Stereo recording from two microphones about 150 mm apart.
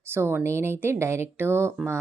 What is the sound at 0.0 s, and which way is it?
Speech, 15° right (ahead or behind).